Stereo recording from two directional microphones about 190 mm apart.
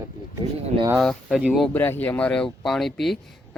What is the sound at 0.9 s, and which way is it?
Speech, centre (ahead or behind).